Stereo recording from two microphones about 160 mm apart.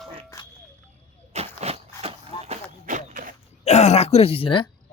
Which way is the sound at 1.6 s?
40° right (ahead or behind).